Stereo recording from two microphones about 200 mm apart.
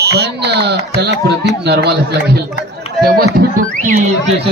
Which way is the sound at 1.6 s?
55° right (ahead or behind).